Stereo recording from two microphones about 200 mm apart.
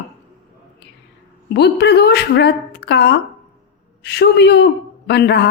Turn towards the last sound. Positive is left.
turn(degrees=55)  # may be behind; listen again after turning